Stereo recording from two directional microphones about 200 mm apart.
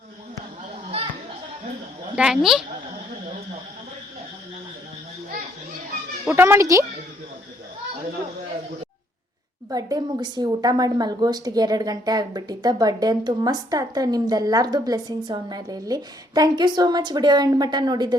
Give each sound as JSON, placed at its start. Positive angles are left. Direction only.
{"t": 2.1, "sound": "speech", "side_deg": -5}
{"t": 6.2, "sound": "speech", "side_deg": -10}
{"t": 9.6, "sound": "a woman's voice", "side_deg": -20}